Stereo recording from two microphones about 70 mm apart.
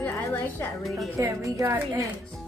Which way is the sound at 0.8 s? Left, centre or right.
Centre.